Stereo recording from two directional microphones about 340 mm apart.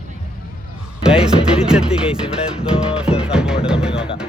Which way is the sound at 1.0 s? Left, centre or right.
Centre.